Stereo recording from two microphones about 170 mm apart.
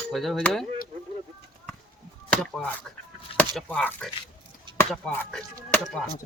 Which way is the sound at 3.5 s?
10° left (ahead or behind).